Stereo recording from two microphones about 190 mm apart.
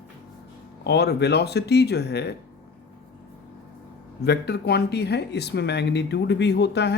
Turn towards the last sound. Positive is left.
turn(degrees=60)  # may be behind; listen again after turning